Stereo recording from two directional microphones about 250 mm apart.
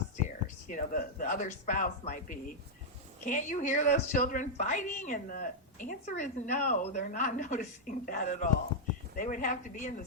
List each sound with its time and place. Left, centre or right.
0.4 s a woman's voice: left